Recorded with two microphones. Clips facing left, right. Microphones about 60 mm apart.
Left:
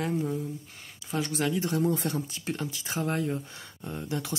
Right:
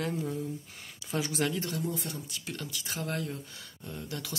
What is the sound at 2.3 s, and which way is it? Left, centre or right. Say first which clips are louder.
Speech: left 5 dB; left.